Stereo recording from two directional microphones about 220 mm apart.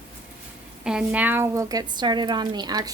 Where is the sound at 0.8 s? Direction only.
5° right (ahead or behind).